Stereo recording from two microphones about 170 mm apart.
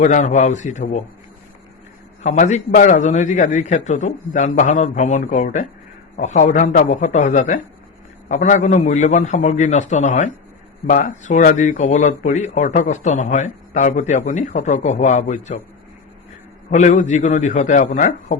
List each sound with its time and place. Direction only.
0.0 s speech: 45° left (ahead or behind)
2.2 s speech: 45° left (ahead or behind)
16.6 s speech: 45° left (ahead or behind)